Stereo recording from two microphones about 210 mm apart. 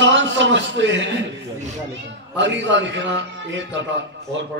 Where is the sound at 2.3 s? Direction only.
60° right (ahead or behind).